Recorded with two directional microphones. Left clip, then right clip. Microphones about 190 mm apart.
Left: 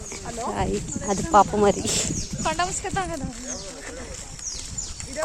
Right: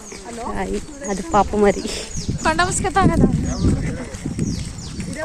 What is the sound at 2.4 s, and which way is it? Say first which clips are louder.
Speech: right 7 dB; 65° right (ahead or behind).